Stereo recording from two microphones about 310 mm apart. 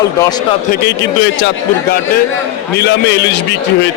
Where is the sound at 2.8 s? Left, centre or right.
Left.